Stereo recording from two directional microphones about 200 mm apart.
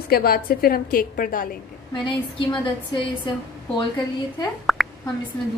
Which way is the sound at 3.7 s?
20° left (ahead or behind).